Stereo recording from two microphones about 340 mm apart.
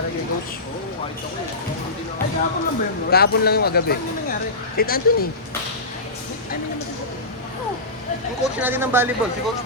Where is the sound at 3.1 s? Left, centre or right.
Left.